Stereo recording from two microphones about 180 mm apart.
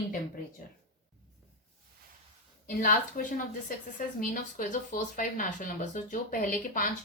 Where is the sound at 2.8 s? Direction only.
45° left (ahead or behind).